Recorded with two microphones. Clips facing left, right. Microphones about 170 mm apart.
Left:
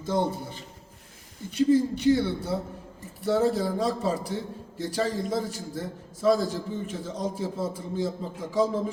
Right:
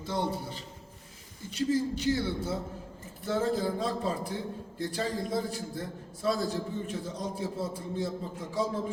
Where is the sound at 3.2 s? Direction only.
75° left (ahead or behind).